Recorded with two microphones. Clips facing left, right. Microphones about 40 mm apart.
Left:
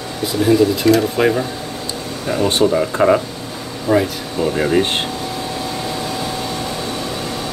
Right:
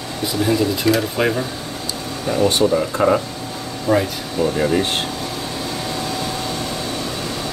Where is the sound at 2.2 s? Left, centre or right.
Centre.